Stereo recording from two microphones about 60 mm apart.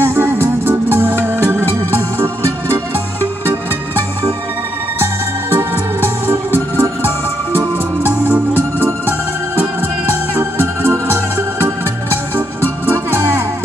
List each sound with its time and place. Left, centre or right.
0.0 s music: right
4.9 s music: right
7.5 s organ: right
9.6 s music: right